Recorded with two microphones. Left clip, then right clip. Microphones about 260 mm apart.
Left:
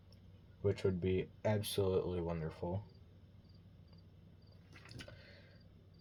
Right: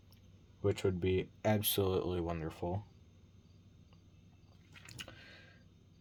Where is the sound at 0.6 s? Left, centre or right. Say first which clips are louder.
Right 2 dB; right.